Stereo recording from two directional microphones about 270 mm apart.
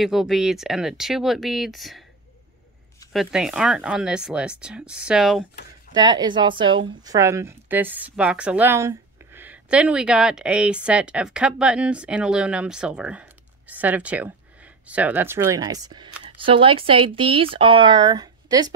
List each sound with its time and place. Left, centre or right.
0.0 s a woman's voice: centre
3.1 s a woman's voice: centre
5.9 s a woman's voice: centre